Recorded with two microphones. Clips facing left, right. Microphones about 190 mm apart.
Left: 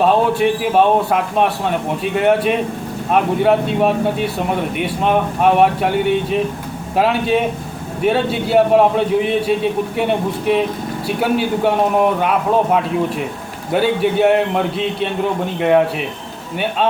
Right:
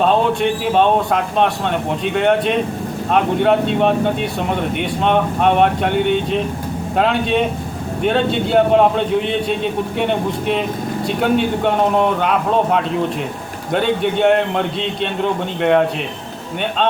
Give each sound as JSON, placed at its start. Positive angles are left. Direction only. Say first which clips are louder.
{"t": 0.0, "sound": "a man's voice", "louder": "left 1 dB", "side_deg": 5}